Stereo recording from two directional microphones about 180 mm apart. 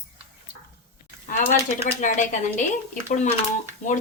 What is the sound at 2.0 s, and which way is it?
Speech, 45° left (ahead or behind).